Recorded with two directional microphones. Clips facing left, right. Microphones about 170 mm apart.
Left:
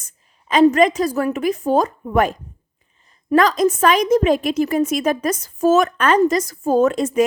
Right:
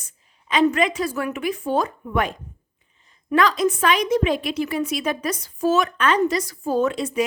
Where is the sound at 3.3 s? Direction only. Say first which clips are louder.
Left 4 dB; 45° left (ahead or behind).